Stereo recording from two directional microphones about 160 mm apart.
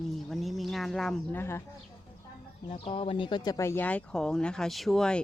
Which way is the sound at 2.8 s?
35° left (ahead or behind).